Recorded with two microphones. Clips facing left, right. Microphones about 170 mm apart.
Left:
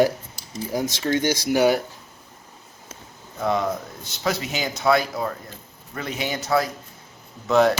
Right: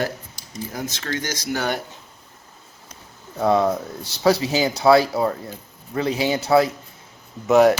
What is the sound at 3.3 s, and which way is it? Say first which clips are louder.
Speech: right 5 dB; 35° right (ahead or behind).